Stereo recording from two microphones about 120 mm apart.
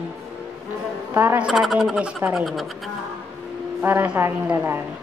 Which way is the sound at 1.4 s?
Centre (ahead or behind).